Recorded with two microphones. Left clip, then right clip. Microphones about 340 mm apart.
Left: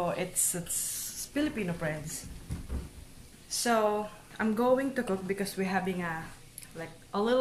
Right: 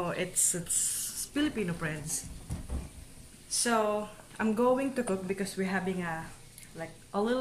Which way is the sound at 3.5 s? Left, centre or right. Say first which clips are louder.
Left 1 dB; centre.